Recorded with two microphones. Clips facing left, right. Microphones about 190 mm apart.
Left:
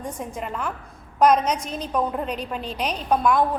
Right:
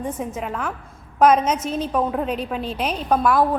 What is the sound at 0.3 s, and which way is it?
A woman's voice, centre (ahead or behind).